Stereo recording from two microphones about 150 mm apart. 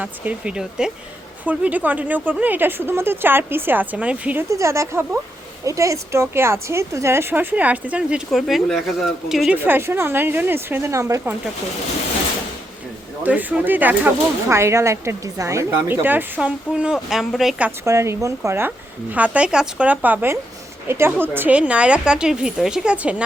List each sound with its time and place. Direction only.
0.0 s speech: 10° right (ahead or behind)
4.4 s speech: 20° right (ahead or behind); by 9.6 s centre (ahead or behind)
9.6 s speech: 15° right (ahead or behind)
13.2 s speech: 10° right (ahead or behind)
17.8 s speech: 20° right (ahead or behind)